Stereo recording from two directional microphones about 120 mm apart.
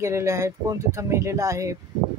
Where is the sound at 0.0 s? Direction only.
25° right (ahead or behind).